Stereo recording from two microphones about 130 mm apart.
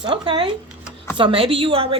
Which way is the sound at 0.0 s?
40° right (ahead or behind).